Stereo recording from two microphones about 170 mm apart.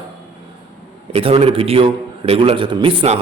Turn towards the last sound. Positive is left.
turn(degrees=-35)  # may be behind; listen again after turning